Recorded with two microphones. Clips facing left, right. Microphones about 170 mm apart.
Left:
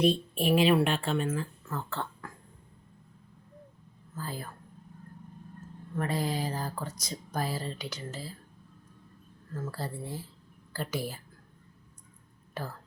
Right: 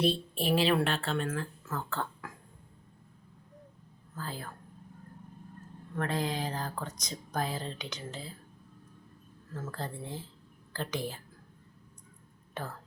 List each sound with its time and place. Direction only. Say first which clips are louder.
0.1 s a woman's voice: left 3 dB; 35° right (ahead or behind)
0.5 s speech: left 3 dB; 10° left (ahead or behind)
4.1 s speech: left 2 dB; 10° left (ahead or behind)
6.0 s speech: left 1 dB; 10° left (ahead or behind)
9.5 s speech: left 3 dB; 5° right (ahead or behind)
9.7 s speech: left 1 dB; 5° left (ahead or behind)